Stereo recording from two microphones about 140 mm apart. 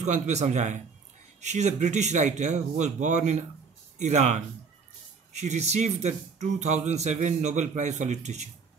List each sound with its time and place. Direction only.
0.0 s a man's voice: 55° right (ahead or behind)